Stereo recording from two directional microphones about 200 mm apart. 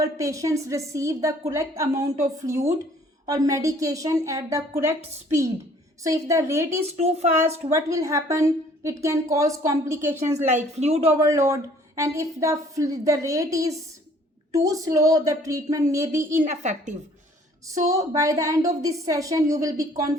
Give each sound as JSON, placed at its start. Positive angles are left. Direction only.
{"t": 0.0, "sound": "a woman's voice", "side_deg": -15}
{"t": 6.1, "sound": "a woman's voice", "side_deg": -15}
{"t": 6.8, "sound": "speech", "side_deg": -30}
{"t": 7.7, "sound": "a woman's voice", "side_deg": -15}
{"t": 10.3, "sound": "speech", "side_deg": -35}
{"t": 11.2, "sound": "a woman's voice", "side_deg": -15}
{"t": 16.5, "sound": "speech", "side_deg": -35}
{"t": 17.8, "sound": "a woman's voice", "side_deg": -15}